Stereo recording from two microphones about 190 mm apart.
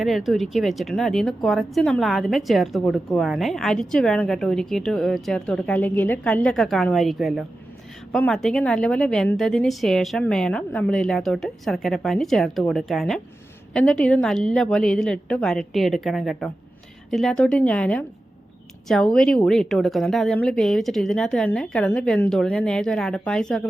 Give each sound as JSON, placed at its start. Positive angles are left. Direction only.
{"t": 0.0, "sound": "a woman's voice", "side_deg": 0}